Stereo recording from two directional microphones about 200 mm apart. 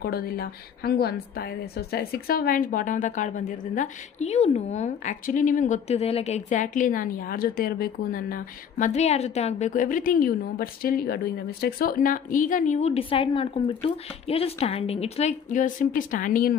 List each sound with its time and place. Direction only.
0.0 s a woman's voice: 50° left (ahead or behind)